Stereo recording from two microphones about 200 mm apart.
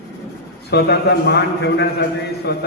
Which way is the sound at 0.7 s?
55° left (ahead or behind).